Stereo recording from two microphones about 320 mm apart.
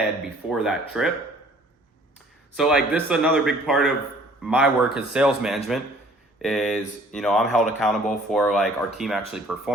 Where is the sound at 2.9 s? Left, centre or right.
Centre.